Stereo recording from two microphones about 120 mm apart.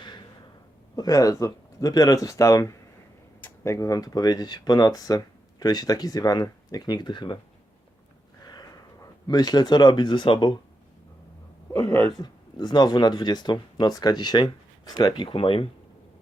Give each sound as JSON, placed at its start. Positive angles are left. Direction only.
{"t": 0.9, "sound": "speech", "side_deg": 30}
{"t": 8.4, "sound": "speech", "side_deg": 35}
{"t": 11.7, "sound": "speech", "side_deg": 25}